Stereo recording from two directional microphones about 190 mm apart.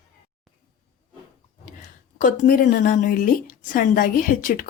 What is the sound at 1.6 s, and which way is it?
A woman's voice, 40° left (ahead or behind).